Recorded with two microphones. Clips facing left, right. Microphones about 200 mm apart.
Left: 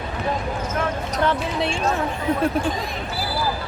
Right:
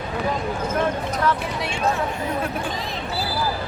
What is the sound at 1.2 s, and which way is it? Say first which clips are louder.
Speech: left 4 dB; 25° left (ahead or behind).